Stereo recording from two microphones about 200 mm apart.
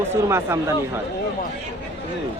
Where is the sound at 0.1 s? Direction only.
10° right (ahead or behind).